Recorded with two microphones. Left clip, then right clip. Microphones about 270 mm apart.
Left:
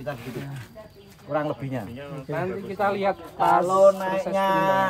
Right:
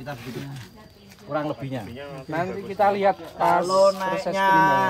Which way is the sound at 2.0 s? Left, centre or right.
Right.